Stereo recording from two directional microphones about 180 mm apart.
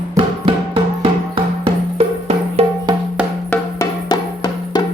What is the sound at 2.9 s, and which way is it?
Music, 20° right (ahead or behind).